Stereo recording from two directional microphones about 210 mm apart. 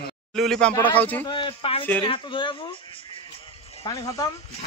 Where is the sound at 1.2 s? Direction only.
25° left (ahead or behind).